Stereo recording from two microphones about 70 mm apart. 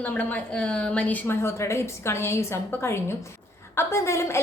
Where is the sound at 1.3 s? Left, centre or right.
Left.